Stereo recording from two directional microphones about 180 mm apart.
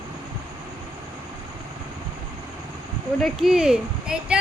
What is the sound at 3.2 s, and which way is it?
Speech, centre (ahead or behind).